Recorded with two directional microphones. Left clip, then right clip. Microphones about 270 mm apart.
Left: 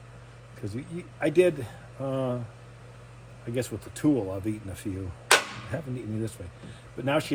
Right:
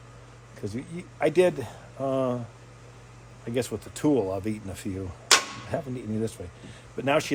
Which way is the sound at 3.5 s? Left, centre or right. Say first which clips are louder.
Right 3 dB; centre.